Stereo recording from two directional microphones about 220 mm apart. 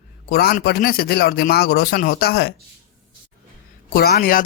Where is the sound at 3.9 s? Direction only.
45° left (ahead or behind).